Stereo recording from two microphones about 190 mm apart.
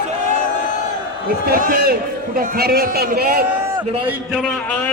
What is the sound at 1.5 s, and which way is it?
A man's voice, 50° right (ahead or behind).